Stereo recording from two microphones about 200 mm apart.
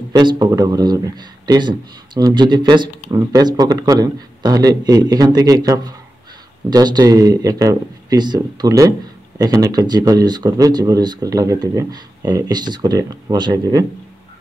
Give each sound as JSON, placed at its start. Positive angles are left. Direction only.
{"t": 0.1, "sound": "speech", "side_deg": -20}